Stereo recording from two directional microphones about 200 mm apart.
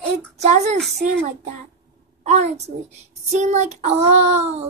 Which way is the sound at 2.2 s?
35° right (ahead or behind).